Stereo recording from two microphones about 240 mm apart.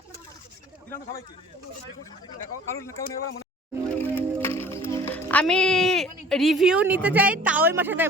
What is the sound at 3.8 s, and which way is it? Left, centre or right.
Music, centre.